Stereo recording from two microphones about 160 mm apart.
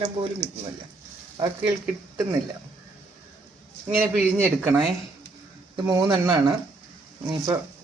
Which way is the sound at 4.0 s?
10° right (ahead or behind).